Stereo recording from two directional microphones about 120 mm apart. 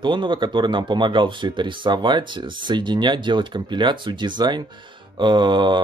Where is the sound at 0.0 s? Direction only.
40° right (ahead or behind).